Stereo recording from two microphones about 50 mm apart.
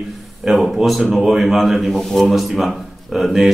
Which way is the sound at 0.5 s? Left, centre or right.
Centre.